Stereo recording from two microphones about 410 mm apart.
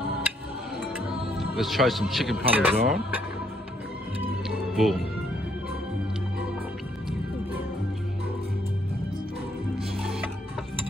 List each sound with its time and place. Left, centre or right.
0.7 s music: centre
1.6 s speech: centre
4.5 s music: centre